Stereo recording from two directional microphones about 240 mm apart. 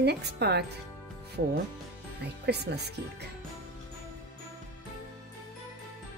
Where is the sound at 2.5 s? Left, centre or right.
Right.